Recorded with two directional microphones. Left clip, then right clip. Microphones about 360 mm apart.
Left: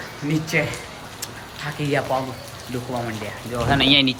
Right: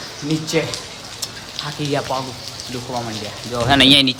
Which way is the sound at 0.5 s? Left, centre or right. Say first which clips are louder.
Right 1 dB; centre.